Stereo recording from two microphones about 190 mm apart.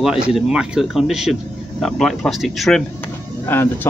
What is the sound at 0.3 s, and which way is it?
Speech, 5° right (ahead or behind).